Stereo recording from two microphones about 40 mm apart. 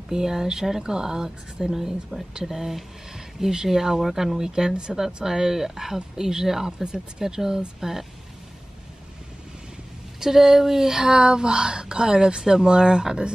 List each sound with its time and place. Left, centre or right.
0.1 s speech: centre
10.2 s speech: centre